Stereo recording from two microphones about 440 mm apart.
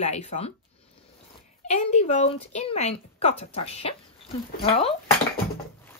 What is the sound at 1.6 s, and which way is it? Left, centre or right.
Speech, centre.